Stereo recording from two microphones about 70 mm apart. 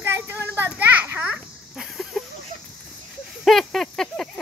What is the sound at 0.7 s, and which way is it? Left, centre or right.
Children playing, right.